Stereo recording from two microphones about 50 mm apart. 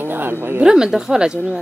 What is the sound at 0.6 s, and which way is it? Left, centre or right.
Speech, centre.